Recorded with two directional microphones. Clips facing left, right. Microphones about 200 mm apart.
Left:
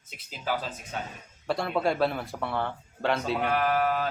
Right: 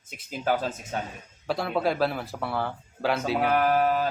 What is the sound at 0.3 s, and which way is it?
Speech, 50° right (ahead or behind).